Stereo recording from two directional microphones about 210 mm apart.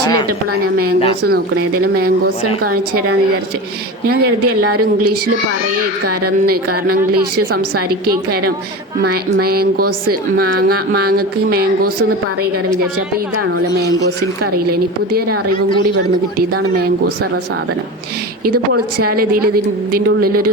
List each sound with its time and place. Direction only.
1.2 s speech: 45° right (ahead or behind)
9.0 s speech: 45° right (ahead or behind)
19.1 s speech: 45° right (ahead or behind)